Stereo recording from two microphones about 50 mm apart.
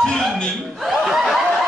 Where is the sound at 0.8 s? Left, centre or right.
Centre.